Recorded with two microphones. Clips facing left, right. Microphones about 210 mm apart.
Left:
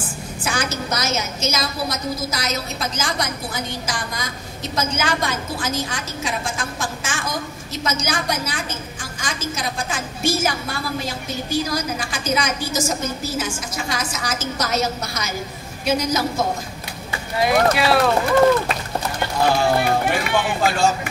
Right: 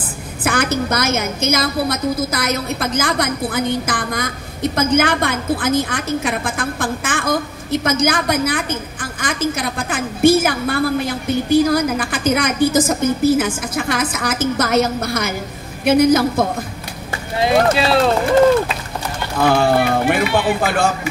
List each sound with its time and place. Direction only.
0.4 s a woman's voice: 55° right (ahead or behind)
17.4 s speech: 25° right (ahead or behind)
19.5 s run: 55° right (ahead or behind)
20.6 s a woman's voice: 55° right (ahead or behind)